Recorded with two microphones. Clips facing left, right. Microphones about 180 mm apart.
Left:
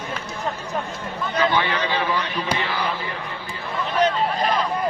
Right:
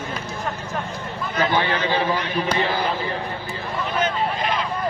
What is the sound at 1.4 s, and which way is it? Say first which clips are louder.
Speech: right 1 dB; 40° right (ahead or behind).